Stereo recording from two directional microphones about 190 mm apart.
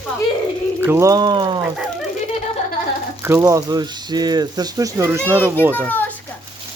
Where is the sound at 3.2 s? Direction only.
15° right (ahead or behind).